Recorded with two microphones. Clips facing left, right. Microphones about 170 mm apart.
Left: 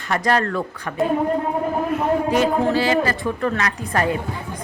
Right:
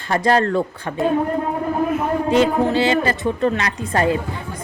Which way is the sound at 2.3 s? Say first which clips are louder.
Right 6 dB; 25° right (ahead or behind).